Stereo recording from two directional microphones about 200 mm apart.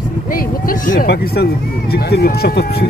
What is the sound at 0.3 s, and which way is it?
Speech, 45° left (ahead or behind).